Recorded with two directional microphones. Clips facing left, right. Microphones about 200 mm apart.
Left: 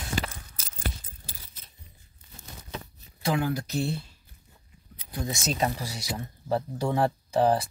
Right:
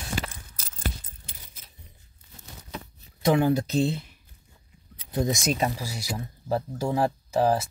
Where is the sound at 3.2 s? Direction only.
25° right (ahead or behind).